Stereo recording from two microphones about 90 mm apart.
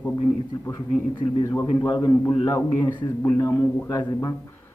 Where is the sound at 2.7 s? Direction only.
55° left (ahead or behind).